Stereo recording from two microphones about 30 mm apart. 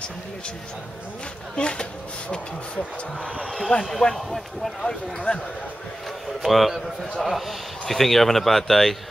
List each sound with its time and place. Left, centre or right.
1.6 s speech: left
3.4 s a man's voice: centre
5.3 s speech: left
6.4 s a man's voice: centre